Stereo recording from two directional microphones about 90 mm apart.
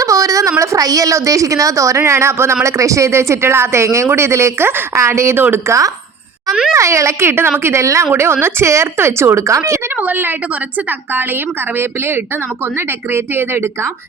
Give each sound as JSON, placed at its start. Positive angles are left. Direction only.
{"t": 0.0, "sound": "a sound", "side_deg": -35}
{"t": 0.6, "sound": "speech", "side_deg": -40}
{"t": 6.5, "sound": "speech", "side_deg": 0}
{"t": 6.7, "sound": "speech", "side_deg": -35}
{"t": 10.0, "sound": "speech", "side_deg": -20}
{"t": 11.8, "sound": "speech", "side_deg": -25}